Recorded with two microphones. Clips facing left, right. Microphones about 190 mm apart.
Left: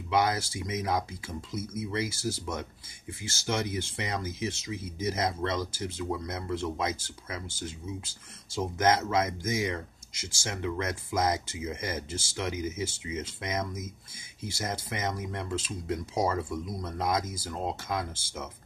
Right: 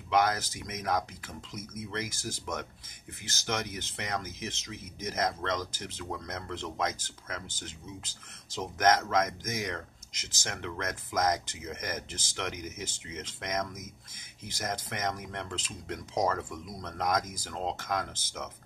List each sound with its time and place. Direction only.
0.1 s speech: 10° left (ahead or behind)